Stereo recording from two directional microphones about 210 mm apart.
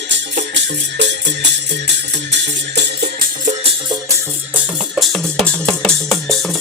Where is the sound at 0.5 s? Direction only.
55° right (ahead or behind).